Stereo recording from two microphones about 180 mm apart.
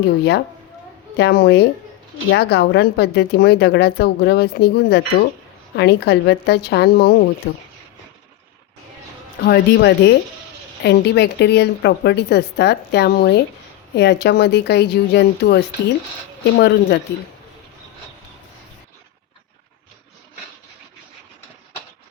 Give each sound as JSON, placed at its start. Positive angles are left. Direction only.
{"t": 0.0, "sound": "a woman's voice", "side_deg": 65}
{"t": 9.4, "sound": "a woman's voice", "side_deg": 60}